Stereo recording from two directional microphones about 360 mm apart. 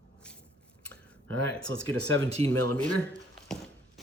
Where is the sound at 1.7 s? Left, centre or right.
Right.